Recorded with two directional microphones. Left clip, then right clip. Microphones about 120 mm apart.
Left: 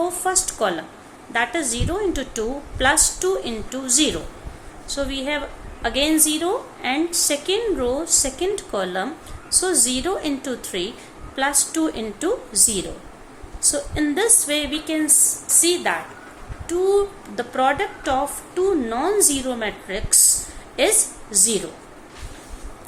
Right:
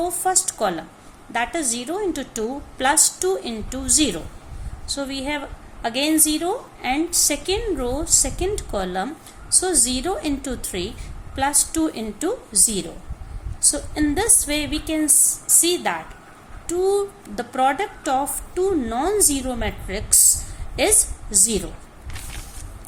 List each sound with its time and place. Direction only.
0.0 s a woman's voice: 45° right (ahead or behind)